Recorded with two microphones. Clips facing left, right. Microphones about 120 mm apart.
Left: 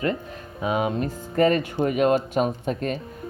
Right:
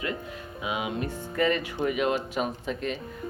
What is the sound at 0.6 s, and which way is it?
Speech, 40° left (ahead or behind).